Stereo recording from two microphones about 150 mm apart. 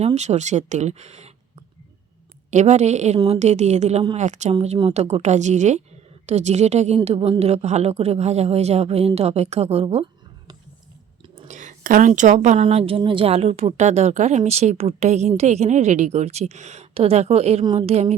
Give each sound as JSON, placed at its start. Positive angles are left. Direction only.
{"t": 0.0, "sound": "a woman's voice", "side_deg": -50}
{"t": 2.5, "sound": "a woman's voice", "side_deg": -50}
{"t": 4.5, "sound": "a woman's voice", "side_deg": -40}
{"t": 11.4, "sound": "a woman's voice", "side_deg": -55}